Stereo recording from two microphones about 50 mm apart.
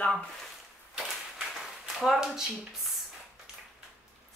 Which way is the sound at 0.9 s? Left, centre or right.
Centre.